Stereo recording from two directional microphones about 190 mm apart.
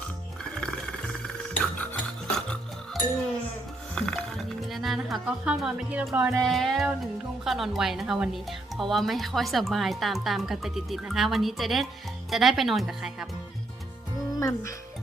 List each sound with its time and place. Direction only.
0.4 s music: 5° left (ahead or behind)
6.4 s speech: centre (ahead or behind)
14.3 s speech: 15° left (ahead or behind)